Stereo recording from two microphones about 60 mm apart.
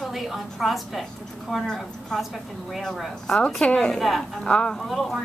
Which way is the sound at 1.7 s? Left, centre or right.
Centre.